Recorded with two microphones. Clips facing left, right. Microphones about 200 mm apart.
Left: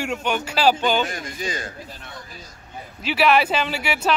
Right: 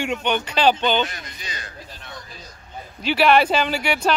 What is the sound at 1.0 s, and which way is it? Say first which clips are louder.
Speech: left 6 dB; 45° left (ahead or behind).